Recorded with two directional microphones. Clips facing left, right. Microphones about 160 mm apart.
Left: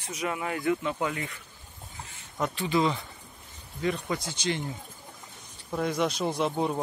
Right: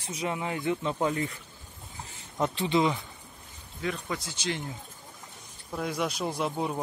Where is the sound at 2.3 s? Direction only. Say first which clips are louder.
Right 1 dB; 25° right (ahead or behind).